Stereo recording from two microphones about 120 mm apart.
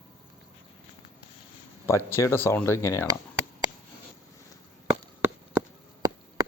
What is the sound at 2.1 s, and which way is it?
Speech, 20° left (ahead or behind).